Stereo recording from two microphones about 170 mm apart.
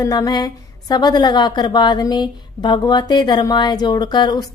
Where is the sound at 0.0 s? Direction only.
20° left (ahead or behind).